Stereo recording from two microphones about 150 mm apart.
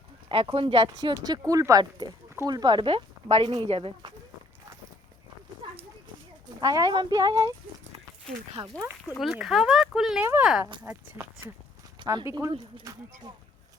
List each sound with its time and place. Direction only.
0.5 s speech: 35° right (ahead or behind)
5.6 s a sound: 35° right (ahead or behind)
6.6 s speech: 25° right (ahead or behind)
8.6 s speech: 25° right (ahead or behind)
9.1 s speech: centre (ahead or behind)
11.2 s speech: 15° right (ahead or behind)